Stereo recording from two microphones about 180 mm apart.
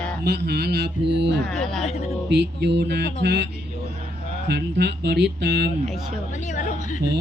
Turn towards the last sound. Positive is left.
turn(degrees=45)  # may be behind; listen again after turning